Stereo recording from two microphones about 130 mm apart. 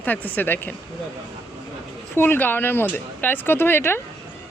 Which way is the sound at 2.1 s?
15° left (ahead or behind).